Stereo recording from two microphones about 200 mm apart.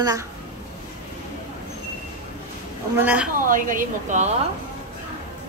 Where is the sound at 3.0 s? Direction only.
5° right (ahead or behind).